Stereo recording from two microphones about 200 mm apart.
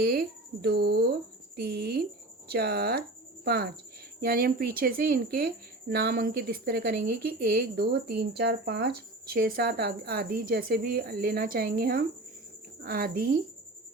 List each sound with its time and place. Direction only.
0.6 s a woman's voice: 50° right (ahead or behind)